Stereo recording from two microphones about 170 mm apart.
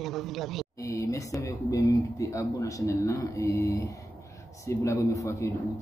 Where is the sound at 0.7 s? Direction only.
20° left (ahead or behind).